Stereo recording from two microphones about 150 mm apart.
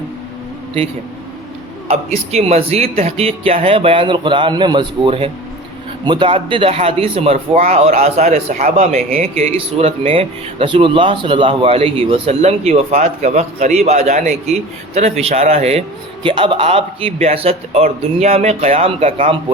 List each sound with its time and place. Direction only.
1.9 s speech: 45° right (ahead or behind)